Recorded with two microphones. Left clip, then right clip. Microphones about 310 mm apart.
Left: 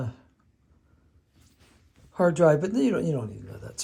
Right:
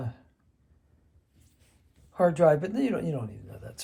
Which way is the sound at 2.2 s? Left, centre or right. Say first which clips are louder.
Left 1 dB; centre.